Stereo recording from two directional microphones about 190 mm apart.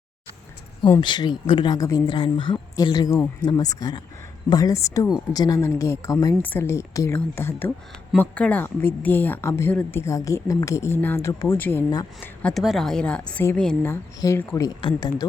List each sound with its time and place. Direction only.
1.0 s speech: 25° left (ahead or behind)
12.4 s a woman's voice: 5° left (ahead or behind); by 15.1 s 25° left (ahead or behind)